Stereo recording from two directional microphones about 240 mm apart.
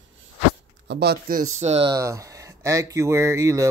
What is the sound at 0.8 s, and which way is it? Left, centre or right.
Speech, right.